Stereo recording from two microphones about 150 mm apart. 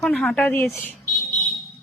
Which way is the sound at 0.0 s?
10° left (ahead or behind).